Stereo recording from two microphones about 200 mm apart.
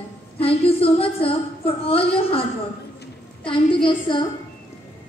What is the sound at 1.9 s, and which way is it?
Speech, 30° left (ahead or behind).